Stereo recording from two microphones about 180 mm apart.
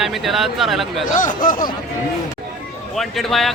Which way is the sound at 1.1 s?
50° left (ahead or behind).